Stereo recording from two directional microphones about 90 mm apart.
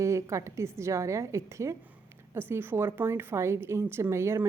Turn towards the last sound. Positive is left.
turn(degrees=-30)  # may be behind; listen again after turning